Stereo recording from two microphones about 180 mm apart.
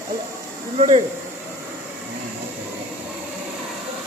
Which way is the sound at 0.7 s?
35° right (ahead or behind).